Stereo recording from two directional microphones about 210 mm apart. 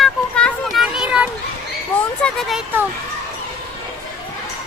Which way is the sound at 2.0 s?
5° left (ahead or behind).